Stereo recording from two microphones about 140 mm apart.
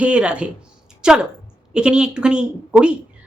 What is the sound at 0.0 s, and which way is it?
A woman's voice, 10° right (ahead or behind).